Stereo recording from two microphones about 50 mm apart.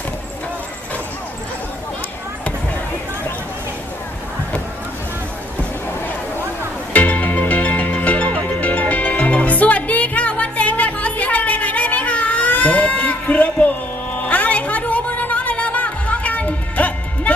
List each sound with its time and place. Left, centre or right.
6.9 s music: left